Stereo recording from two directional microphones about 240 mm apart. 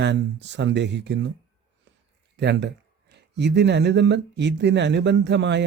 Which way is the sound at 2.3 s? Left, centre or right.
Right.